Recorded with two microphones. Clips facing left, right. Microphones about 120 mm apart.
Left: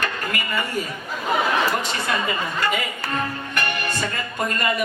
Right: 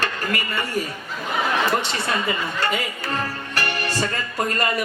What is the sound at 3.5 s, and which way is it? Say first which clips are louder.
Music: right 2 dB; 30° right (ahead or behind).